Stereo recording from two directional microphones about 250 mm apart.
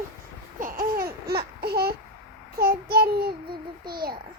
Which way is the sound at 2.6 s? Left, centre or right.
Right.